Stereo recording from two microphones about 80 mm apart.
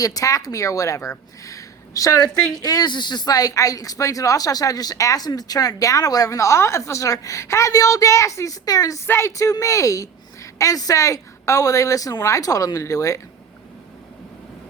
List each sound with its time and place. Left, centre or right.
0.0 s speech: left
1.5 s a sound: left
2.6 s speech: left
9.0 s a woman's voice: left
9.3 s speech: left